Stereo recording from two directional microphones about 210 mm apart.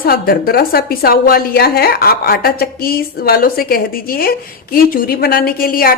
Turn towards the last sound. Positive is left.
turn(degrees=45)  # may be behind; listen again after turning